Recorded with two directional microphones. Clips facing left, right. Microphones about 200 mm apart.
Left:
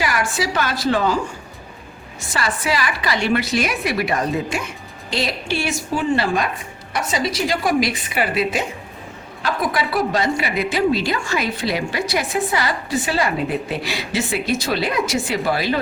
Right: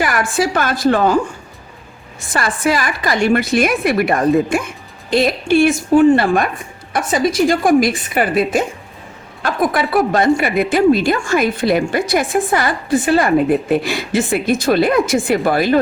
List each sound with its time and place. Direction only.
0.0 s a woman's voice: 55° right (ahead or behind)
2.3 s a woman's voice: 50° right (ahead or behind)